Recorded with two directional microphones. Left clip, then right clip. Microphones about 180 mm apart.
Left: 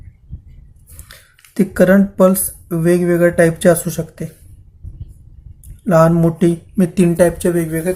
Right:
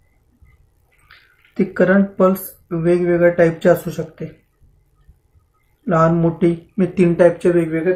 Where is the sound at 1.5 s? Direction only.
55° left (ahead or behind).